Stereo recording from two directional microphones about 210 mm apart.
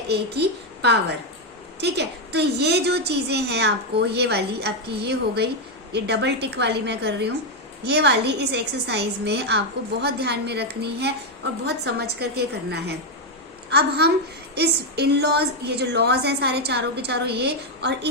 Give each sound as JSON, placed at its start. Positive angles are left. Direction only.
{"t": 0.1, "sound": "a woman's voice", "side_deg": -50}